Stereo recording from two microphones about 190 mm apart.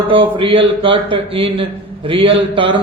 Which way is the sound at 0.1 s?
25° right (ahead or behind).